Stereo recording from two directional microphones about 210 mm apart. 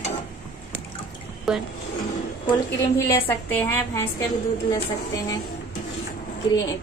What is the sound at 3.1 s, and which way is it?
A woman's voice, 10° left (ahead or behind).